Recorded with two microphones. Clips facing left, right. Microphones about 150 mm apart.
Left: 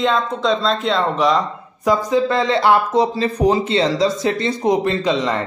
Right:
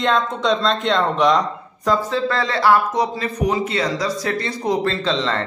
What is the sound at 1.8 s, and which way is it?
A man's voice, 15° left (ahead or behind).